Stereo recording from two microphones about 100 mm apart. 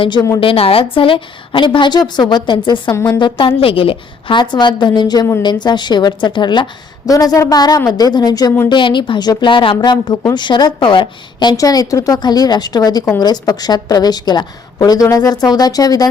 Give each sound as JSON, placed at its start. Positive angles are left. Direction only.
{"t": 0.0, "sound": "a woman's voice", "side_deg": 50}
{"t": 0.3, "sound": "a woman's voice", "side_deg": 70}
{"t": 8.7, "sound": "a woman's voice", "side_deg": 55}
{"t": 11.5, "sound": "a woman's voice", "side_deg": 35}